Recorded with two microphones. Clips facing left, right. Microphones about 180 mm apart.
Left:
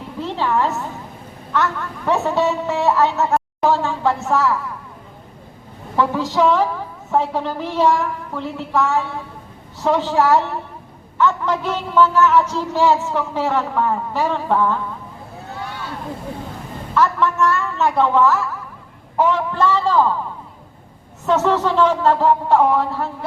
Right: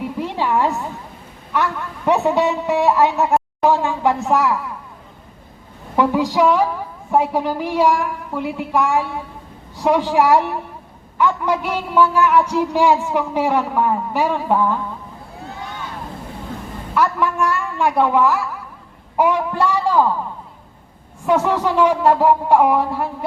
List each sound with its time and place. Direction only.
0.2 s a sound: 15° right (ahead or behind)
1.5 s a man's voice: 15° right (ahead or behind)
6.0 s a man's voice: 15° right (ahead or behind)
16.9 s a man's voice: 10° right (ahead or behind)
21.2 s a man's voice: 10° right (ahead or behind)